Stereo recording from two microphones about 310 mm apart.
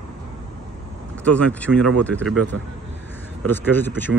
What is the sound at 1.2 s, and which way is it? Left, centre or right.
Speech, centre.